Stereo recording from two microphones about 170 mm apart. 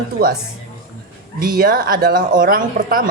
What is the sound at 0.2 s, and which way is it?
Speech, 60° right (ahead or behind).